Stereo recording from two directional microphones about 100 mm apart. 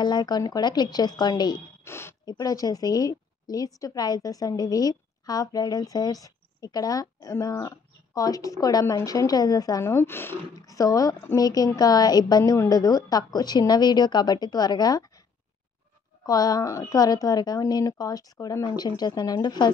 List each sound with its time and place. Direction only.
0.0 s a woman's voice: 45° left (ahead or behind)
1.9 s speech: 25° left (ahead or behind)
2.2 s a woman's voice: 40° left (ahead or behind)
9.8 s speech: 25° left (ahead or behind)
10.5 s a woman's voice: 35° left (ahead or behind)
16.3 s a woman's voice: 40° left (ahead or behind)